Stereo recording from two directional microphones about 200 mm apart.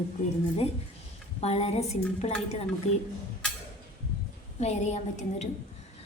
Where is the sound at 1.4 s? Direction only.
30° left (ahead or behind).